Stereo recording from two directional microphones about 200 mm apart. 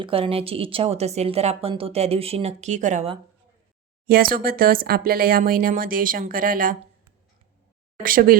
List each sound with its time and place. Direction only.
0.0 s a woman's voice: 25° right (ahead or behind); by 6.7 s 45° right (ahead or behind)
8.0 s speech: 45° right (ahead or behind)